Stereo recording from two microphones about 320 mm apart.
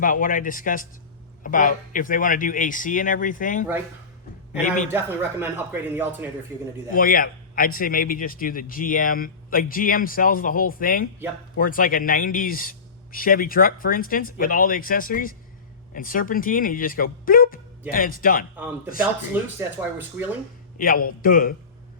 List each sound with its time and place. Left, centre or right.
0.0 s a man's voice: left
4.9 s speech: centre
6.9 s a man's voice: left
19.3 s speech: centre
20.7 s a man's voice: left